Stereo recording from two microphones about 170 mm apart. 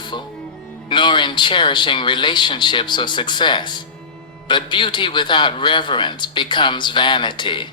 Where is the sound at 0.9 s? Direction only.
25° left (ahead or behind).